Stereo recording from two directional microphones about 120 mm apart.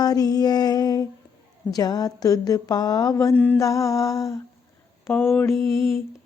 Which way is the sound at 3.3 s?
10° left (ahead or behind).